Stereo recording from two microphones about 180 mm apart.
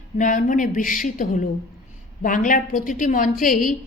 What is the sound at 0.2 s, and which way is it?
A woman's voice, 45° left (ahead or behind).